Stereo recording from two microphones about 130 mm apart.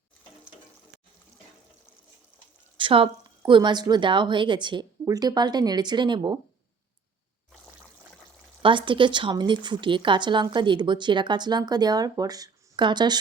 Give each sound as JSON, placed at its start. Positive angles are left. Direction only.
{"t": 2.7, "sound": "a woman's voice", "side_deg": -40}
{"t": 8.6, "sound": "a woman's voice", "side_deg": -40}